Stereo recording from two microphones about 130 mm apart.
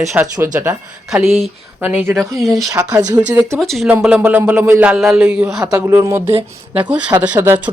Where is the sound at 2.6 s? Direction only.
25° right (ahead or behind).